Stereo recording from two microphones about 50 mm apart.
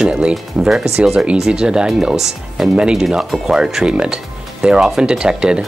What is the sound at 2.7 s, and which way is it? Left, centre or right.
Speech, centre.